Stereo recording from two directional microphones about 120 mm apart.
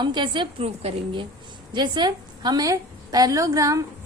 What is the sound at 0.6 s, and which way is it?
Speech, 55° right (ahead or behind).